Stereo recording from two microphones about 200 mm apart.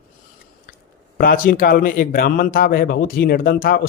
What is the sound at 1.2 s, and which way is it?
A man's voice, 45° left (ahead or behind).